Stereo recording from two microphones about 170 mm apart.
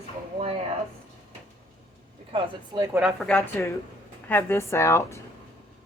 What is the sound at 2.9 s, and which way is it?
Speech, 5° right (ahead or behind).